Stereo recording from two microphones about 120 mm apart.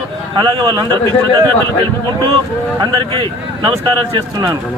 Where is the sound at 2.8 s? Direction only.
40° right (ahead or behind).